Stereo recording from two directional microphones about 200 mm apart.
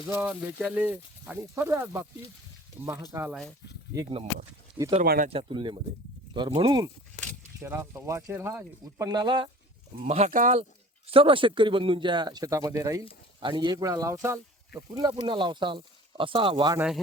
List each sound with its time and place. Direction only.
0.1 s speech: 5° right (ahead or behind)
5.0 s speech: 45° right (ahead or behind)
5.3 s speech: 25° right (ahead or behind)
7.6 s speech: 10° right (ahead or behind)
10.0 s speech: 35° right (ahead or behind)
16.7 s speech: 5° right (ahead or behind)